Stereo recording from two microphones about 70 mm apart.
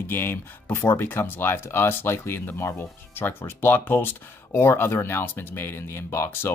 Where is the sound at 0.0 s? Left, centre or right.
Left.